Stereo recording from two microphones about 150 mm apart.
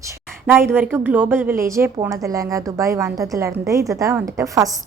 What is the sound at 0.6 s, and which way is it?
A woman's voice, 15° right (ahead or behind).